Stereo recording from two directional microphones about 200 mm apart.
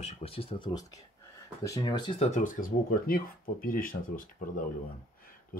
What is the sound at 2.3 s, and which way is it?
Speech, 40° left (ahead or behind).